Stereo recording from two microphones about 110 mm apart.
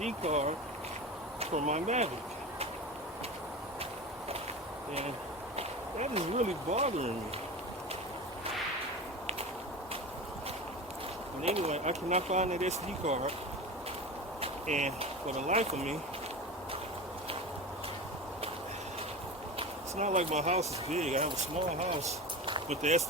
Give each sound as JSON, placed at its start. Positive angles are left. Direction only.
{"t": 0.0, "sound": "speech", "side_deg": -90}
{"t": 5.5, "sound": "speech", "side_deg": -70}
{"t": 11.4, "sound": "speech", "side_deg": -70}
{"t": 14.4, "sound": "speech", "side_deg": -90}
{"t": 19.5, "sound": "speech", "side_deg": -90}
{"t": 22.7, "sound": "speech", "side_deg": -90}